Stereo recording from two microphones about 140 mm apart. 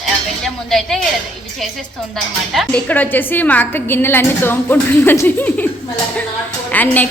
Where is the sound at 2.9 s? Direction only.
10° left (ahead or behind).